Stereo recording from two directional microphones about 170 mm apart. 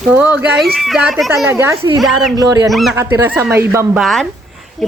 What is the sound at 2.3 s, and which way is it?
Speech, 20° right (ahead or behind).